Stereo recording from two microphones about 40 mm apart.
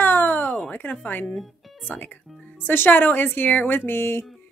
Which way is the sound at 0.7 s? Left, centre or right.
Left.